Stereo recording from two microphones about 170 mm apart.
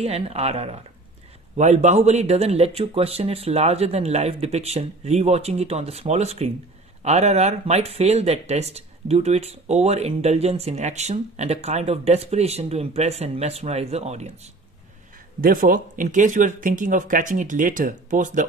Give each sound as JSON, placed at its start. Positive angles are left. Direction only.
{"t": 0.0, "sound": "speech", "side_deg": -35}
{"t": 15.4, "sound": "speech", "side_deg": -55}